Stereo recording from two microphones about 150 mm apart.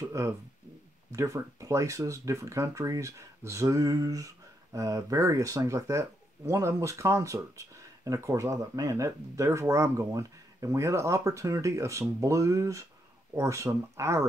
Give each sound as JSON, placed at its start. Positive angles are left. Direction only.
{"t": 0.0, "sound": "speech", "side_deg": -20}